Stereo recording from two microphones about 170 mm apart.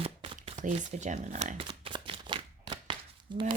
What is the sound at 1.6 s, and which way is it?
Shuffling cards, 30° right (ahead or behind).